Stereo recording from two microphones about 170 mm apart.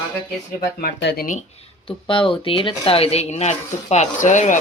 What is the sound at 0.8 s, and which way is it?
Speech, 60° left (ahead or behind).